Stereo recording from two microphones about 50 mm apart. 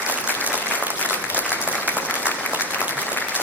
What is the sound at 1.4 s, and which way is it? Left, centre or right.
Applause, left.